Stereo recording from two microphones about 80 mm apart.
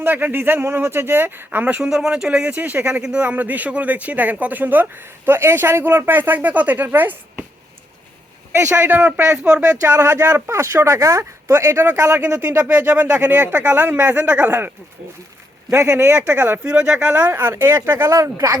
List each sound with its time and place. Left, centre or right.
0.0 s speech: right
3.0 s speech: centre
3.2 s speech: right
8.5 s speech: right
10.9 s speech: right
12.2 s speech: centre
15.7 s speech: right
16.1 s speech: right
16.6 s speech: centre
18.1 s speech: right